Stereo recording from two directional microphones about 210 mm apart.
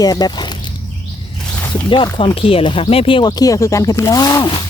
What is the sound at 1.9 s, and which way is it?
Speech, 25° left (ahead or behind).